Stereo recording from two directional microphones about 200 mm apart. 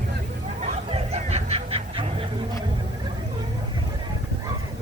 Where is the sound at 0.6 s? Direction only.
30° right (ahead or behind).